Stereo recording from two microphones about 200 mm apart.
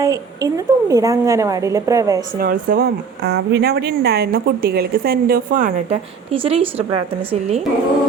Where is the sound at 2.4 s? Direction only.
45° right (ahead or behind).